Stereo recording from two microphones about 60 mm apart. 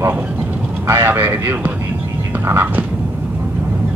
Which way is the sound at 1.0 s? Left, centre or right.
Right.